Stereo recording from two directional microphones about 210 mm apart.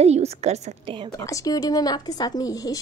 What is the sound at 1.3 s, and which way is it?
Speech, 15° left (ahead or behind).